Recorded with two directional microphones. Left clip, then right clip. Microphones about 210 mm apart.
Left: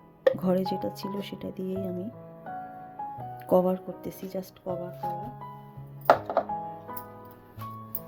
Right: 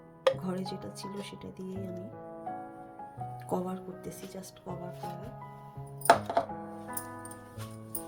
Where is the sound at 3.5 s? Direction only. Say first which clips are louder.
Left 13 dB; 40° left (ahead or behind).